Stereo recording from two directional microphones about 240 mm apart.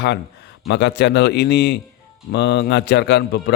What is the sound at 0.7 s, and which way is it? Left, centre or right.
A man's voice, left.